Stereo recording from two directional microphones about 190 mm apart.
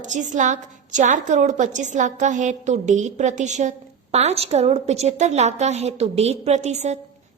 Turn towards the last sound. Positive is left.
turn(degrees=-35)  # may be behind; listen again after turning